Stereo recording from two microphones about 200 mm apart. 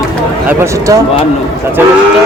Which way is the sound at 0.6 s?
15° right (ahead or behind).